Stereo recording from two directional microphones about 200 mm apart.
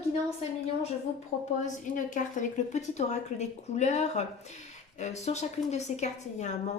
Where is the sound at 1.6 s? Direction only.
40° left (ahead or behind).